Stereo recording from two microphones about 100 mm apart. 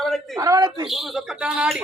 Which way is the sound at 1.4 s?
10° right (ahead or behind).